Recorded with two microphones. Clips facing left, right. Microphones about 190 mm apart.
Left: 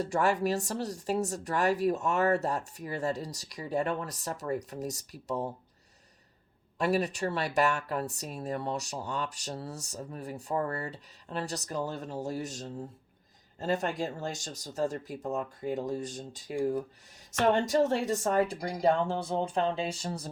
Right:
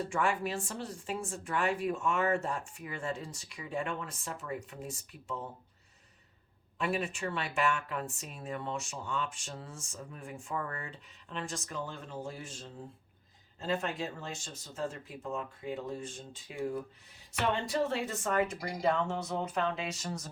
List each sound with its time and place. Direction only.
0.0 s speech: 40° left (ahead or behind)
6.7 s speech: 40° left (ahead or behind)